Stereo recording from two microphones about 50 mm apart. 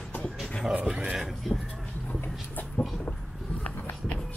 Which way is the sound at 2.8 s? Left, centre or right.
Left.